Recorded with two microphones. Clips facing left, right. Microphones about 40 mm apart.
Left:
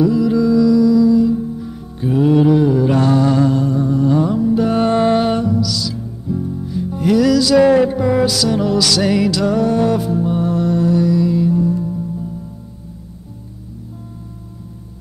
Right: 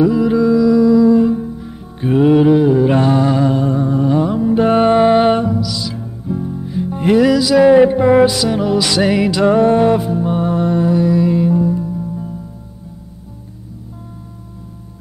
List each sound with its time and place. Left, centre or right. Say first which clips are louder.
0.0 s music: right 1 dB; right
1.5 s music: left 2 dB; centre
2.0 s music: right 3 dB; right
2.3 s humming: right 1 dB; centre
4.5 s music: right 7 dB; right; by 7.8 s centre
7.8 s music: right 5 dB; right